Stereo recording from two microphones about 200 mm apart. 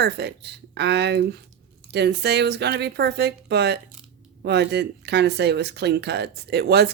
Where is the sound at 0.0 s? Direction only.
55° right (ahead or behind).